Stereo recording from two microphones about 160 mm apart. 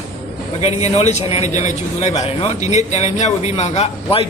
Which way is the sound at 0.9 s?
45° left (ahead or behind).